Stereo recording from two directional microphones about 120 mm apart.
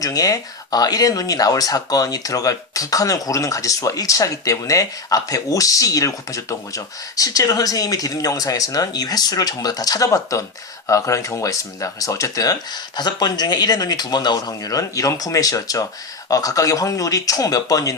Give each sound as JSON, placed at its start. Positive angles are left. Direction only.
{"t": 0.0, "sound": "speech", "side_deg": 30}